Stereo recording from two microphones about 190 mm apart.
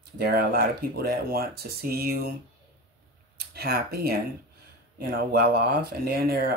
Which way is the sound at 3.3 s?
55° right (ahead or behind).